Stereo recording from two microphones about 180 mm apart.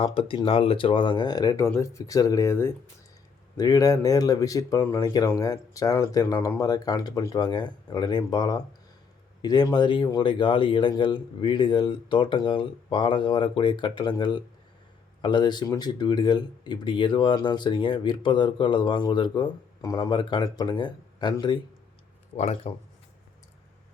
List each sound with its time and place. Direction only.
0.0 s speech: 30° left (ahead or behind)
22.4 s speech: 35° left (ahead or behind)